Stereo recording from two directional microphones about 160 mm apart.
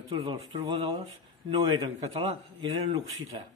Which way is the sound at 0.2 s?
30° right (ahead or behind).